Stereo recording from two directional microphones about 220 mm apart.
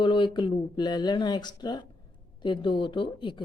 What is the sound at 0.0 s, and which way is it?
Speech, 20° left (ahead or behind).